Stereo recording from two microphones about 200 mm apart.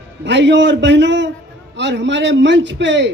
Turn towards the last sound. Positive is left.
turn(degrees=-65)  # may be behind; listen again after turning